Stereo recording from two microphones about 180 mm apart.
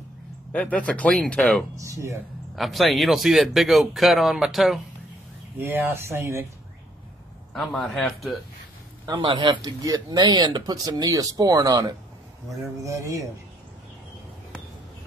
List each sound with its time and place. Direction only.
0.5 s speech: 5° left (ahead or behind)
1.8 s speech: 15° right (ahead or behind)
2.5 s speech: centre (ahead or behind)
7.5 s speech: centre (ahead or behind)
9.0 s speech: 25° right (ahead or behind)